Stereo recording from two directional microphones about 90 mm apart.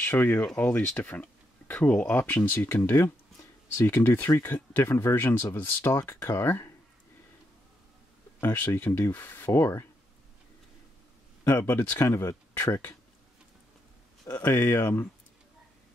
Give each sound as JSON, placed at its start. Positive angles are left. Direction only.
{"t": 0.0, "sound": "speech", "side_deg": 20}
{"t": 8.4, "sound": "speech", "side_deg": 20}
{"t": 11.4, "sound": "speech", "side_deg": 30}
{"t": 14.2, "sound": "speech", "side_deg": 25}